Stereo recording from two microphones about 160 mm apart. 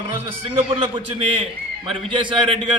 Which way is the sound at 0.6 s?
30° right (ahead or behind).